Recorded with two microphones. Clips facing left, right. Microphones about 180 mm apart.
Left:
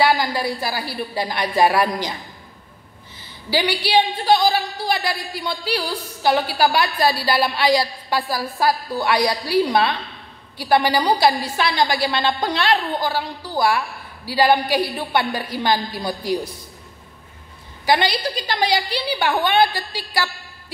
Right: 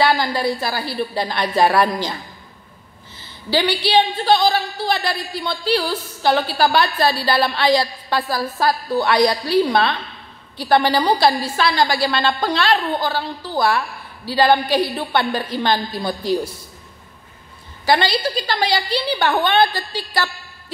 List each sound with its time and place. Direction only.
0.0 s a woman's voice: 10° left (ahead or behind)
3.4 s a woman's voice: 10° left (ahead or behind)
17.8 s a woman's voice: 15° left (ahead or behind)